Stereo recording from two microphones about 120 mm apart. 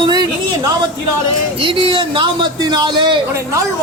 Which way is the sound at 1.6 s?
45° right (ahead or behind).